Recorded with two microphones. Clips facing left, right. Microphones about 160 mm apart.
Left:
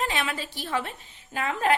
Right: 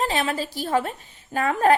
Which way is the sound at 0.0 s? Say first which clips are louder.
Right 5 dB; 35° right (ahead or behind).